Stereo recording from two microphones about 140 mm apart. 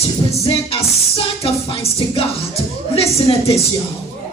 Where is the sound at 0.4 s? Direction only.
45° left (ahead or behind).